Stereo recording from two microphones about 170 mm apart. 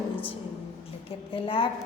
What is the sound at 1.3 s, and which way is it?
Speech, 30° left (ahead or behind).